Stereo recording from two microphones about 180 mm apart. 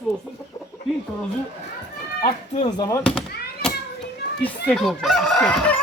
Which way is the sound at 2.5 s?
25° left (ahead or behind).